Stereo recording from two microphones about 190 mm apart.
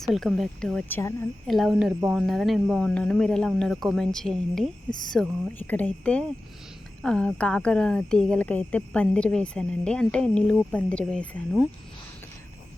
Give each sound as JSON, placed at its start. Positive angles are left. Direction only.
{"t": 0.0, "sound": "speech", "side_deg": 0}
{"t": 1.5, "sound": "speech", "side_deg": 0}